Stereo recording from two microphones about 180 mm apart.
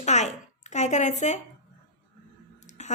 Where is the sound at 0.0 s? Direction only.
40° left (ahead or behind).